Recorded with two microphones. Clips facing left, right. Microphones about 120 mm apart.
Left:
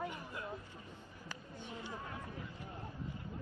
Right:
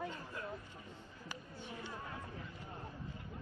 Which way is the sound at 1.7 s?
15° left (ahead or behind).